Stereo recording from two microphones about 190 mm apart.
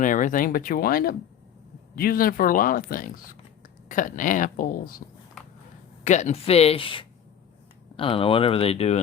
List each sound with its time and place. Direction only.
0.0 s speech: 40° left (ahead or behind)
6.1 s speech: 40° left (ahead or behind)